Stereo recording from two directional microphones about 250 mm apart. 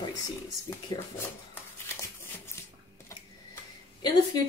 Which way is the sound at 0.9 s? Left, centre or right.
Centre.